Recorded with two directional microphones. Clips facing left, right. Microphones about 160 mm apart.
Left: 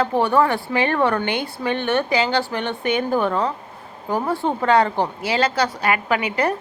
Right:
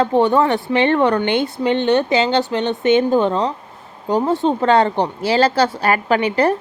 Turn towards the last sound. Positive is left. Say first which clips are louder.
# right 5 dB
turn(degrees=-30)  # may be behind; listen again after turning